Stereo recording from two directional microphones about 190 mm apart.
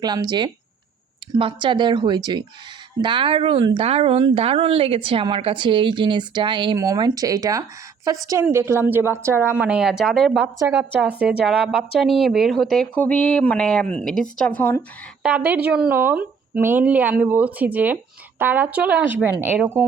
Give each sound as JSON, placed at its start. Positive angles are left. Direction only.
{"t": 0.0, "sound": "speech", "side_deg": -20}
{"t": 15.2, "sound": "speech", "side_deg": -10}